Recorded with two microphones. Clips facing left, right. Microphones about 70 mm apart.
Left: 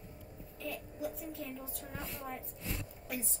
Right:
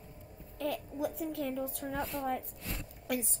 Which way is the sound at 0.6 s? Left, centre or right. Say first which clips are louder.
Right 6 dB; right.